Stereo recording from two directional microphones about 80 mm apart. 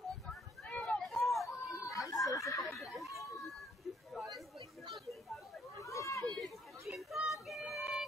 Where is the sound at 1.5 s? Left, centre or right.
Left.